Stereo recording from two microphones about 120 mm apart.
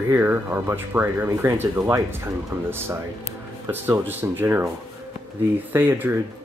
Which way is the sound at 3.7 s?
15° right (ahead or behind).